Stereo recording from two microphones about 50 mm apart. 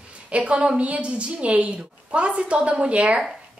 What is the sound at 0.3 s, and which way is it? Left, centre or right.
A woman's voice, right.